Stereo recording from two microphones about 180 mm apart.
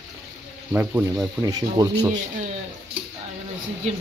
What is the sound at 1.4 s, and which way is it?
Speech, 20° right (ahead or behind).